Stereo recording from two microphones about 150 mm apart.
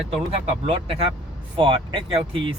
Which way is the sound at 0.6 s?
40° right (ahead or behind).